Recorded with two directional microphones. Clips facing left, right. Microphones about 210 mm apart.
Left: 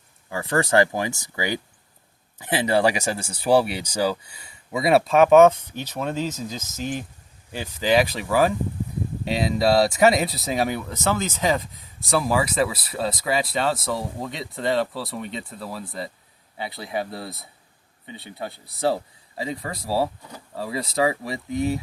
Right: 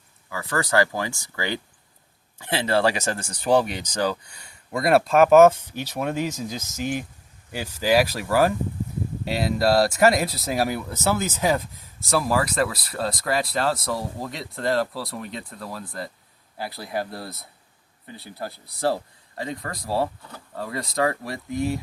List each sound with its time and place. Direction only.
0.3 s speech: 25° left (ahead or behind); by 21.8 s centre (ahead or behind)